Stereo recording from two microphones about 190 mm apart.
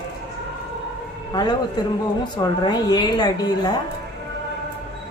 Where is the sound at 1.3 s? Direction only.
20° left (ahead or behind).